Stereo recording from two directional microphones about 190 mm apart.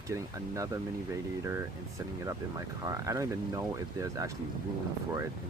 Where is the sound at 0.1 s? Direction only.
15° right (ahead or behind).